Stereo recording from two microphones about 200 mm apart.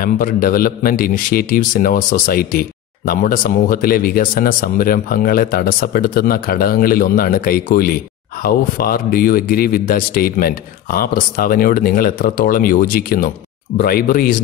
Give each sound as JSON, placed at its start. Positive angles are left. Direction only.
{"t": 0.0, "sound": "a man's voice", "side_deg": 45}